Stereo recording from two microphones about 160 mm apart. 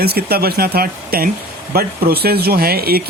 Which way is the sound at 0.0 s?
80° right.